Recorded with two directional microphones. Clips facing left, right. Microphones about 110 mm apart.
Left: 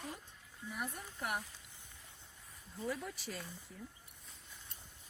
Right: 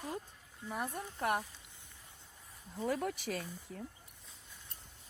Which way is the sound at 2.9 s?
70° right (ahead or behind).